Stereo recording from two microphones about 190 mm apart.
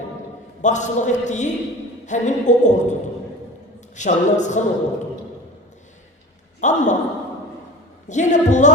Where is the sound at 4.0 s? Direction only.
40° left (ahead or behind).